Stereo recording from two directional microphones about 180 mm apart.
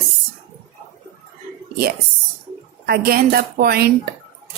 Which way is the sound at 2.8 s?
55° right (ahead or behind).